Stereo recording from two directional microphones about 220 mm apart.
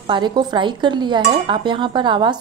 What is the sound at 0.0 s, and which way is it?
Speech, 20° right (ahead or behind).